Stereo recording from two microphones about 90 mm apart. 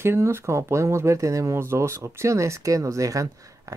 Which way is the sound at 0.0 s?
30° right (ahead or behind).